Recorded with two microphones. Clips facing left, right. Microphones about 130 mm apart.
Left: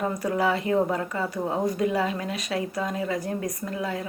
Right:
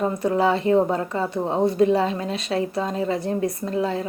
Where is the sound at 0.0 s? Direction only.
25° right (ahead or behind).